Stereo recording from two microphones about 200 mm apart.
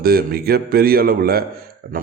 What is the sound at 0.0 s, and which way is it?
Speech, 50° right (ahead or behind).